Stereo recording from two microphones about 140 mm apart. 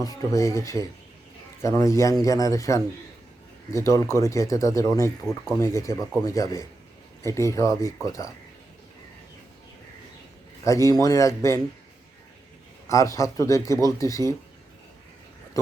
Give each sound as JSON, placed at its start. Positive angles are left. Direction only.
{"t": 0.0, "sound": "speech", "side_deg": 25}
{"t": 10.6, "sound": "speech", "side_deg": 20}
{"t": 12.9, "sound": "speech", "side_deg": 20}